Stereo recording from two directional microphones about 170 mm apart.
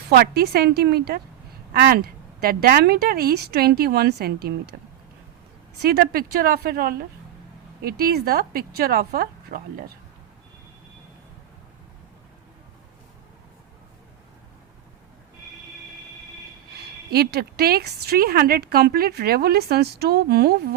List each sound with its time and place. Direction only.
0.1 s a woman's voice: 70° right (ahead or behind)
5.8 s a woman's voice: 65° right (ahead or behind)
17.1 s a woman's voice: 70° right (ahead or behind)